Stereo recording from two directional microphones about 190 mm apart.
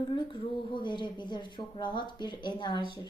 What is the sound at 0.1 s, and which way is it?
Speech, 25° left (ahead or behind).